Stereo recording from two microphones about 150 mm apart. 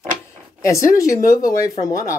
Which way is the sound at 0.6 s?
20° left (ahead or behind).